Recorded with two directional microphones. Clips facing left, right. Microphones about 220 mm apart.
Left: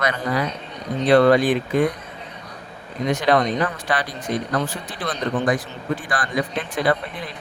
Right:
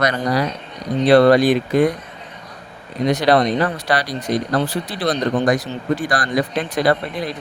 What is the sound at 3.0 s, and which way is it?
Speech, 35° right (ahead or behind).